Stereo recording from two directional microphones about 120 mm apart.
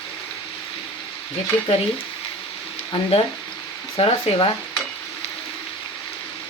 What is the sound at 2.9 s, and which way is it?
Frying, 50° left (ahead or behind).